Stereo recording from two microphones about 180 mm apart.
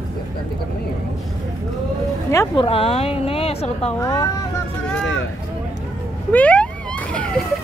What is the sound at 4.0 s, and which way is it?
Speech, 15° left (ahead or behind).